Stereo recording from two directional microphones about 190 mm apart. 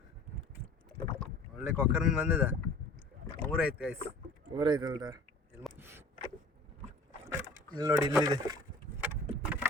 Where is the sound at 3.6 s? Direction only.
5° right (ahead or behind).